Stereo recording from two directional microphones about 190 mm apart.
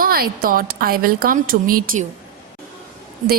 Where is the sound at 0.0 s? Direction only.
50° right (ahead or behind).